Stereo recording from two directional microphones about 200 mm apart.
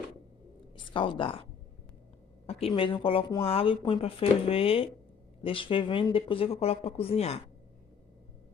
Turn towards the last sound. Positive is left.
turn(degrees=30)  # may be behind; listen again after turning